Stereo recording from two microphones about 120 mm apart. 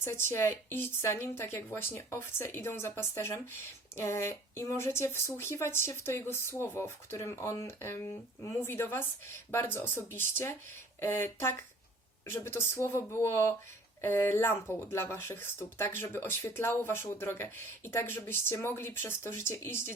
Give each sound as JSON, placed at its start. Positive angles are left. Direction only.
{"t": 0.0, "sound": "speech", "side_deg": 20}